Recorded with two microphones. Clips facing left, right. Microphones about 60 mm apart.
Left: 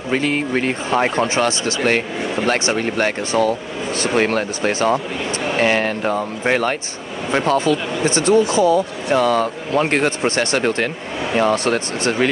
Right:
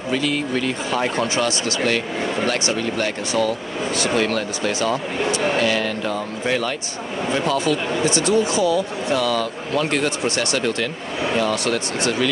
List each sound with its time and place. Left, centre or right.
0.1 s speech: left